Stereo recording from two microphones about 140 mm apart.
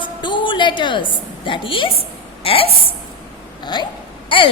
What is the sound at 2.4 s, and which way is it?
Speech, 40° left (ahead or behind).